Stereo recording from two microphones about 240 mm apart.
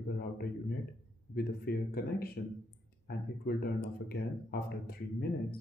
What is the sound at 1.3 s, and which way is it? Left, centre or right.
Speech, left.